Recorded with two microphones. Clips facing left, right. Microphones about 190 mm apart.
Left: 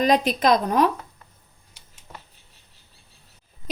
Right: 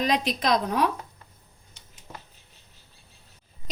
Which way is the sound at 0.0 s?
50° left (ahead or behind).